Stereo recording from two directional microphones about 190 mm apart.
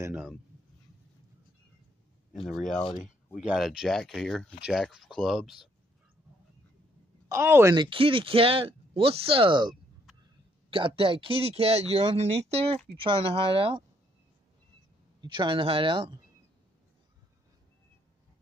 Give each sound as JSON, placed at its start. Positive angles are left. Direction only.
{"t": 2.3, "sound": "speech", "side_deg": 0}
{"t": 7.2, "sound": "speech", "side_deg": -15}
{"t": 7.7, "sound": "speech", "side_deg": -25}
{"t": 15.1, "sound": "speech", "side_deg": -25}